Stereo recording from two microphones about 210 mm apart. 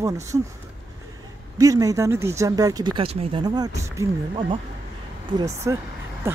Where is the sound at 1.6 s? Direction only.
15° right (ahead or behind).